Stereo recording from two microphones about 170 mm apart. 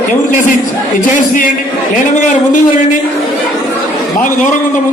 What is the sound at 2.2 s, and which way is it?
Speech, 50° left (ahead or behind).